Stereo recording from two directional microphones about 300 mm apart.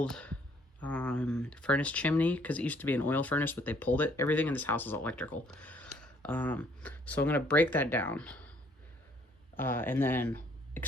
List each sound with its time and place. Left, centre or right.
0.0 s speech: centre
9.6 s speech: centre